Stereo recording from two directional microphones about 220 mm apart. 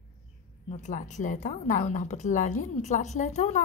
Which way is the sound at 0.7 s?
35° left (ahead or behind).